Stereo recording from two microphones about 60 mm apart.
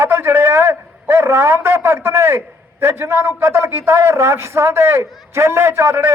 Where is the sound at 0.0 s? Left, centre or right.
Right.